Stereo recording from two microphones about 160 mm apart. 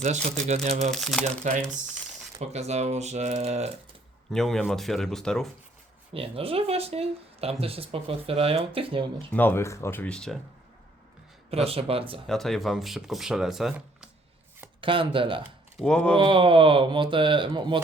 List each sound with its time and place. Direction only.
0.3 s speech: 45° right (ahead or behind)
0.9 s speech: centre (ahead or behind)
1.5 s speech: 50° right (ahead or behind)
4.3 s speech: 5° left (ahead or behind)
6.1 s speech: 35° right (ahead or behind)
9.1 s speech: 10° left (ahead or behind)
11.5 s speech: 40° right (ahead or behind)
12.3 s speech: centre (ahead or behind)
14.8 s speech: 35° right (ahead or behind)
15.8 s speech: 5° left (ahead or behind)
16.1 s speech: 35° right (ahead or behind)